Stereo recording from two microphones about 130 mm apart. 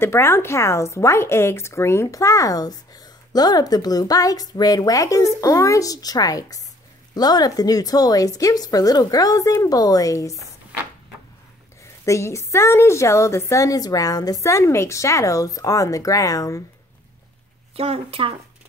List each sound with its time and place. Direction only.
0.0 s speech: 20° left (ahead or behind)
11.8 s speech: 20° left (ahead or behind)
17.7 s speech: 50° right (ahead or behind)